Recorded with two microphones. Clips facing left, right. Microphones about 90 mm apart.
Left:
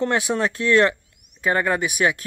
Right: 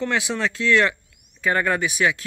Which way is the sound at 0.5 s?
50° left (ahead or behind).